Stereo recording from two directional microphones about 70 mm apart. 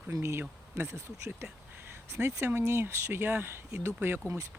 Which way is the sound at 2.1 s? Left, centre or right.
Right.